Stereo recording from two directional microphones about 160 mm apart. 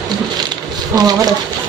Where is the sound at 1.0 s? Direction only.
25° right (ahead or behind).